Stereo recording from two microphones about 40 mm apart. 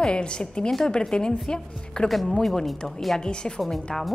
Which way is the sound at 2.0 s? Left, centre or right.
Centre.